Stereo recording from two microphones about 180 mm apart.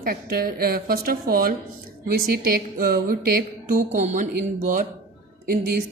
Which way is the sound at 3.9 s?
45° right (ahead or behind).